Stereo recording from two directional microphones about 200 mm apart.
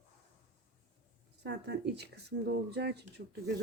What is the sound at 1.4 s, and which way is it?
Speech, 60° right (ahead or behind).